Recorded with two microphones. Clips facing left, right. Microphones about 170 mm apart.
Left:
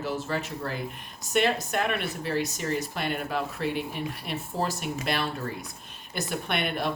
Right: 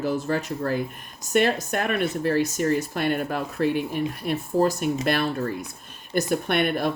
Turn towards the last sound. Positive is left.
turn(degrees=-50)  # may be behind; listen again after turning